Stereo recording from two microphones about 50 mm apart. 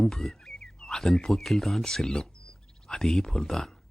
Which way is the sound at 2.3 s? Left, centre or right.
Centre.